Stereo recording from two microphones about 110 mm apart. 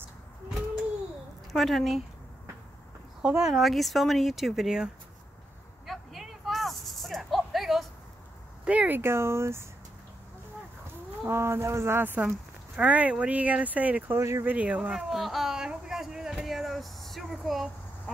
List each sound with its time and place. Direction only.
1.5 s speech: centre (ahead or behind)
3.2 s speech: 10° right (ahead or behind)
5.9 s snake: centre (ahead or behind)
8.6 s speech: 15° right (ahead or behind)
11.2 s speech: 20° right (ahead or behind)
14.5 s speech: 15° right (ahead or behind)
15.0 s a sound: centre (ahead or behind)